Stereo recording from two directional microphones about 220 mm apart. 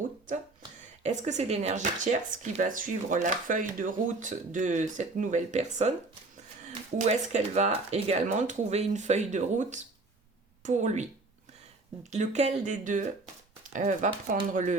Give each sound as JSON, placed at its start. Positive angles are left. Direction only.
{"t": 1.0, "sound": "speech", "side_deg": -30}
{"t": 6.7, "sound": "speech", "side_deg": -30}
{"t": 12.1, "sound": "speech", "side_deg": -30}